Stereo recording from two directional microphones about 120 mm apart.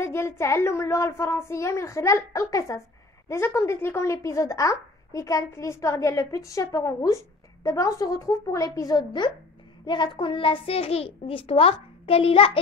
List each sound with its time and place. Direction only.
0.0 s a child's voice: 20° left (ahead or behind); by 12.5 s 50° left (ahead or behind)